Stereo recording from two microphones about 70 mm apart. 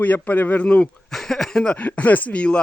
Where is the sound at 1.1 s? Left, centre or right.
Centre.